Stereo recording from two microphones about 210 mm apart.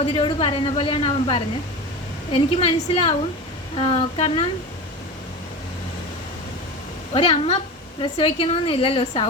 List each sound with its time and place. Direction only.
0.0 s a woman's voice: 25° left (ahead or behind)
7.1 s a woman's voice: 25° left (ahead or behind)